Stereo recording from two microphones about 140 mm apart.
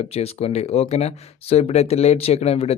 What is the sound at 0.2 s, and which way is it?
Speech, 45° left (ahead or behind).